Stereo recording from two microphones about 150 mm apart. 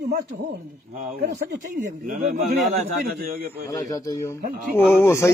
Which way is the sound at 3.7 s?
25° left (ahead or behind).